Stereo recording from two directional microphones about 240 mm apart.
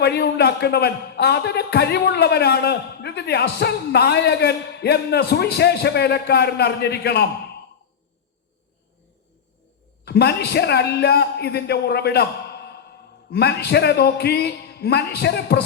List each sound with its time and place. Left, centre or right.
0.0 s a man's voice: left
10.0 s a man's voice: left